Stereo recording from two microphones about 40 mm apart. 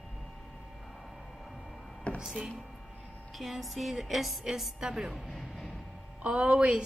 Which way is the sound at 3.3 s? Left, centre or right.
Centre.